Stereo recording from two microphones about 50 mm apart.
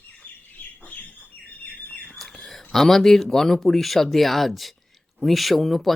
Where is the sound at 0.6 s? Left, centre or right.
Left.